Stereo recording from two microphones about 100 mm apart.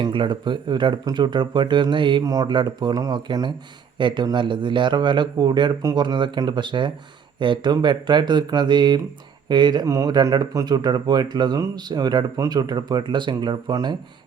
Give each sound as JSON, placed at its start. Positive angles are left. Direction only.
{"t": 0.0, "sound": "speech", "side_deg": -55}
{"t": 2.2, "sound": "speech", "side_deg": -40}
{"t": 9.8, "sound": "speech", "side_deg": -30}